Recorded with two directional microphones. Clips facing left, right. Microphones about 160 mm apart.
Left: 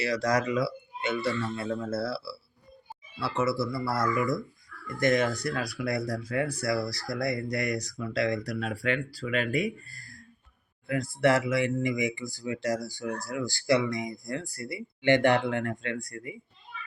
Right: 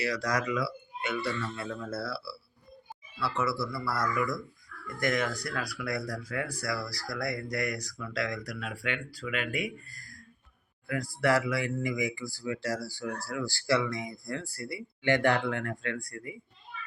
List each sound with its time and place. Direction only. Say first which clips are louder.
0.0 s speech: left 4 dB; 25° left (ahead or behind)